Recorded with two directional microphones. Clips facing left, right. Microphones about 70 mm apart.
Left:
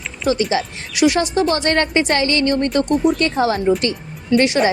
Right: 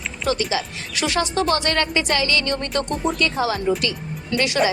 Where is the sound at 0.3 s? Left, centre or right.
Left.